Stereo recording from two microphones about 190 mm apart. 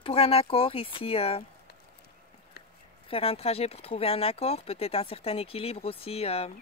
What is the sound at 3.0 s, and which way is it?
Speech, 30° left (ahead or behind).